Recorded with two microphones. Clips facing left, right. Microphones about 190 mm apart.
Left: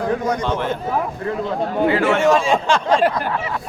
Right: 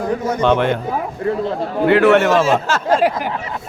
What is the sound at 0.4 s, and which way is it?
Speech, 70° right (ahead or behind).